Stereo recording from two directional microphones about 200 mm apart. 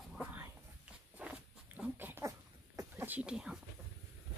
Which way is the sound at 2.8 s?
10° right (ahead or behind).